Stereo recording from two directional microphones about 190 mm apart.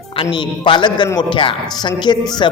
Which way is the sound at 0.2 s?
25° left (ahead or behind).